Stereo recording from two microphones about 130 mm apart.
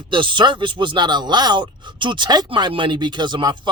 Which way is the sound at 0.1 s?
40° right (ahead or behind).